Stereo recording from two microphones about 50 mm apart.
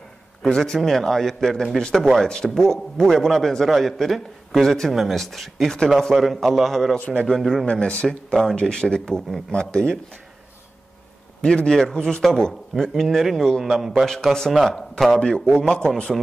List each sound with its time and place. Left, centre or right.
0.4 s a man's voice: centre
7.6 s speech: left
11.4 s a man's voice: centre
15.2 s speech: centre